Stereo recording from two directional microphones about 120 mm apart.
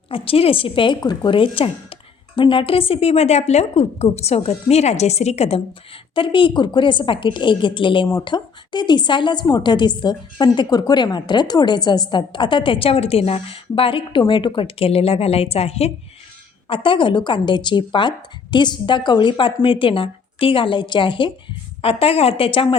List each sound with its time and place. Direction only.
0.1 s a woman's voice: 50° left (ahead or behind)
16.6 s a woman's voice: 45° left (ahead or behind)